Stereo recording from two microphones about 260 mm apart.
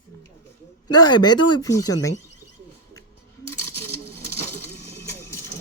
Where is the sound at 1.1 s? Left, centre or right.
Centre.